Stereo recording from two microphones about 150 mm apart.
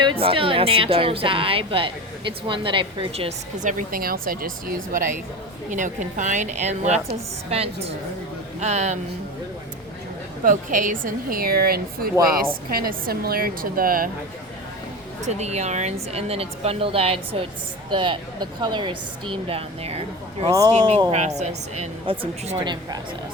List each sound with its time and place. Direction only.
0.0 s a woman's voice: 35° right (ahead or behind)
3.6 s a woman's voice: 60° right (ahead or behind)
5.7 s a woman's voice: 55° right (ahead or behind)
10.4 s a woman's voice: 60° right (ahead or behind)
15.2 s a woman's voice: 50° right (ahead or behind)
20.5 s a woman's voice: 20° right (ahead or behind)
21.1 s a woman's voice: 50° right (ahead or behind); by 23.0 s 30° right (ahead or behind)